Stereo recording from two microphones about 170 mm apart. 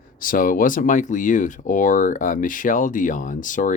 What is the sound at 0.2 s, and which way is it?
Speech, 55° left (ahead or behind).